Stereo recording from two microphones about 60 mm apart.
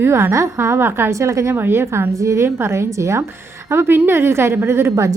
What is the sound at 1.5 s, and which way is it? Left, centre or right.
Speech, right.